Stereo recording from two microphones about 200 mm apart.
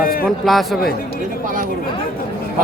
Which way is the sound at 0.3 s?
Centre (ahead or behind).